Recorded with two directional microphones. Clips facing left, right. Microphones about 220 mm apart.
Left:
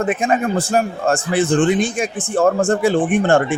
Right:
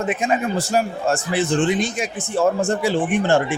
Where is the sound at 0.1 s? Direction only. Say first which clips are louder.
Left 3 dB; 50° left (ahead or behind).